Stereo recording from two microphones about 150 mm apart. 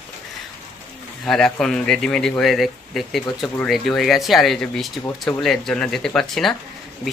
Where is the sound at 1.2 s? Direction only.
5° left (ahead or behind).